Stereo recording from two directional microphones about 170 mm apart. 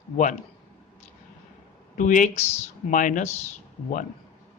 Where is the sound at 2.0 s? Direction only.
50° left (ahead or behind).